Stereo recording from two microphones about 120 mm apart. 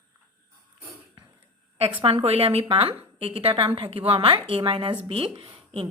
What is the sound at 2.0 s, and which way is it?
A woman's voice, 55° right (ahead or behind).